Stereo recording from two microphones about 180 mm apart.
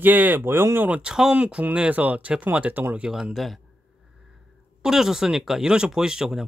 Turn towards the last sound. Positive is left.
turn(degrees=-5)  # may be behind; listen again after turning